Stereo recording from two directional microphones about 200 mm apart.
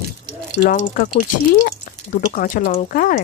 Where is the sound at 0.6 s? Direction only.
45° left (ahead or behind).